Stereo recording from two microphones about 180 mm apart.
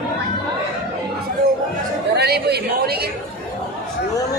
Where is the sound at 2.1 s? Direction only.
65° right (ahead or behind).